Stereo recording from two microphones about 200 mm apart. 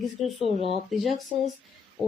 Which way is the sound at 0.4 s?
30° left (ahead or behind).